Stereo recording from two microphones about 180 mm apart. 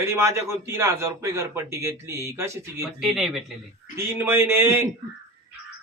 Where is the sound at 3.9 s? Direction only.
10° right (ahead or behind).